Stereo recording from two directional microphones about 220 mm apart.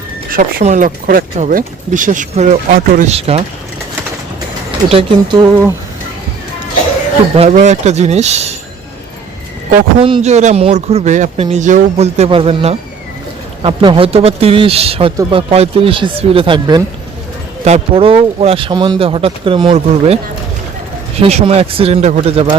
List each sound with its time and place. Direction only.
0.3 s speech: 35° right (ahead or behind)
3.1 s a man's voice: 25° right (ahead or behind)
4.9 s a man's voice: 25° right (ahead or behind)
7.3 s speech: 30° right (ahead or behind)
10.0 s a man's voice: 30° right (ahead or behind)
21.2 s a man's voice: 25° right (ahead or behind)